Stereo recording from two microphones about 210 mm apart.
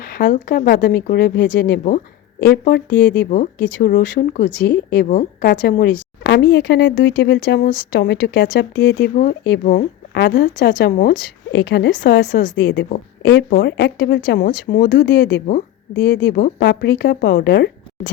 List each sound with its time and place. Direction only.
0.0 s speech: 45° left (ahead or behind)
3.2 s speech: 35° left (ahead or behind)